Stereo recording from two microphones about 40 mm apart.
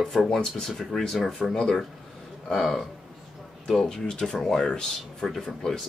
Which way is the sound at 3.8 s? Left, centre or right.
Centre.